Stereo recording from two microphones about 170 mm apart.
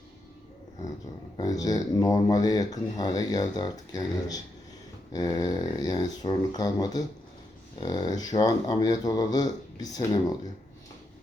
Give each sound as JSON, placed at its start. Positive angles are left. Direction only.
{"t": 1.4, "sound": "speech", "side_deg": 20}